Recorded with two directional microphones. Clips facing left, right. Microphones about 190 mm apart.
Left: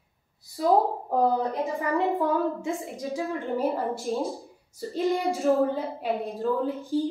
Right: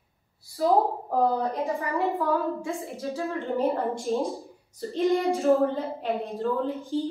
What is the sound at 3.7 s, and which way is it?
Speech, 5° left (ahead or behind).